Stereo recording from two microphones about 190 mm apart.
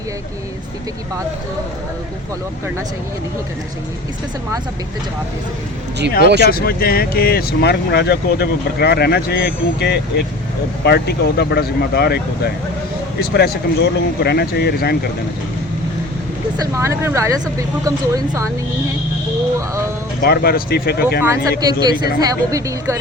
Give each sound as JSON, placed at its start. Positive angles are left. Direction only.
{"t": 6.2, "sound": "speech", "side_deg": -65}
{"t": 6.5, "sound": "speech", "side_deg": 50}
{"t": 16.6, "sound": "speech", "side_deg": -15}
{"t": 19.5, "sound": "speech", "side_deg": -15}
{"t": 20.2, "sound": "speech", "side_deg": 55}
{"t": 21.7, "sound": "speech", "side_deg": -20}